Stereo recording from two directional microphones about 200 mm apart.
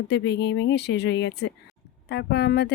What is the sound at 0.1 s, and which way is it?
A woman's voice, 60° left (ahead or behind).